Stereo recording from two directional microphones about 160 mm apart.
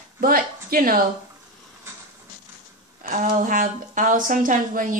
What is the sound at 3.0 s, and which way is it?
A woman's voice, 55° right (ahead or behind).